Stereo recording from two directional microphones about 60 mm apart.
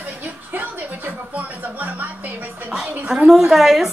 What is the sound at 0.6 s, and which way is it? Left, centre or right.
Music, right.